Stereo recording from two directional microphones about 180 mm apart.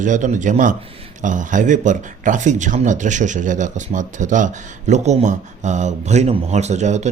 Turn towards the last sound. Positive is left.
turn(degrees=-40)  # may be behind; listen again after turning